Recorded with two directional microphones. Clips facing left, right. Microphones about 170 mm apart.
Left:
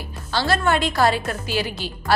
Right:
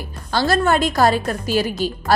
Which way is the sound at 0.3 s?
45° right (ahead or behind).